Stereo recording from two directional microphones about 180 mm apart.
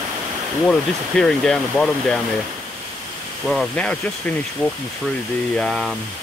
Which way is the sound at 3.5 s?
5° left (ahead or behind).